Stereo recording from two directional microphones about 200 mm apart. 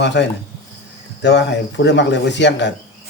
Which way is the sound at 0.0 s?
60° left (ahead or behind).